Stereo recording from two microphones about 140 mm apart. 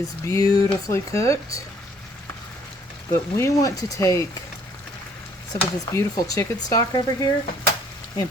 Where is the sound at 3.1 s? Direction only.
20° left (ahead or behind).